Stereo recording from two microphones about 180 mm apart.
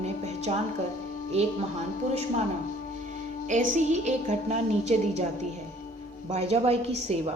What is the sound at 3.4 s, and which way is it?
A woman's voice, 40° right (ahead or behind).